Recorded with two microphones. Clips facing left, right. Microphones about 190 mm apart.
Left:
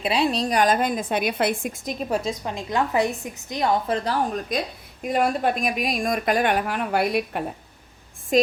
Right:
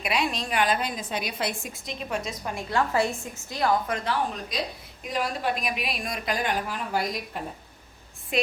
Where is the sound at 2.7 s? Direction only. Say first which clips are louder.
Left 2 dB; 15° left (ahead or behind); by 7.4 s 65° left (ahead or behind).